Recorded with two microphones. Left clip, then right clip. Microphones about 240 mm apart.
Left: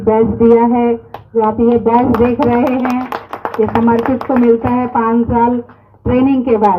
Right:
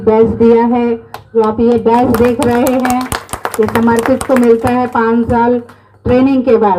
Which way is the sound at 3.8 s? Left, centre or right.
Right.